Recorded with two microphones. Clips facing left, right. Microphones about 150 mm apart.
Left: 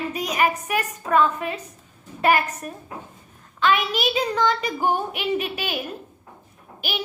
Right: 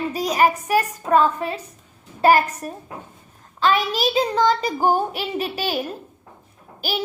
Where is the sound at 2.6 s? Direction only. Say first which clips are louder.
Right 2 dB; 35° right (ahead or behind).